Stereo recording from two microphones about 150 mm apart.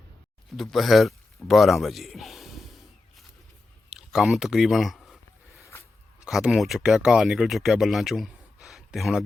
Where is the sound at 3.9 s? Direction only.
5° right (ahead or behind).